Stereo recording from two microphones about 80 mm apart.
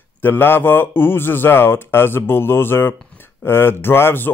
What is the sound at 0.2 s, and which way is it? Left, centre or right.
Speech, left.